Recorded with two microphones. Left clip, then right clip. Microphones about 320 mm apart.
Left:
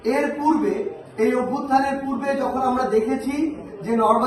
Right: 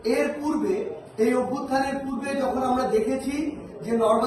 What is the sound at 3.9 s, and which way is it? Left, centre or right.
Speech, centre.